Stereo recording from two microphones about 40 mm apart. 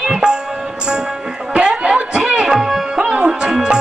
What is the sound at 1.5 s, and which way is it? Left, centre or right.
Music, right.